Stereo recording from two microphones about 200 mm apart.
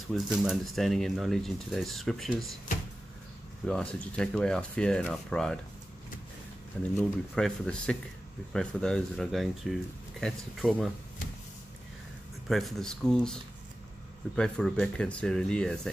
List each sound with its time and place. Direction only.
0.1 s speech: centre (ahead or behind)
3.6 s speech: 5° left (ahead or behind)
7.0 s speech: 5° left (ahead or behind)
12.4 s speech: centre (ahead or behind)